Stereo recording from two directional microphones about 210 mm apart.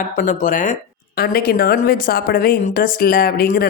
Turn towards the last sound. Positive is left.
turn(degrees=45)  # may be behind; listen again after turning